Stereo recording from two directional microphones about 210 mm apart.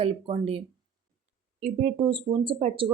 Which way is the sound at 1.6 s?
25° right (ahead or behind).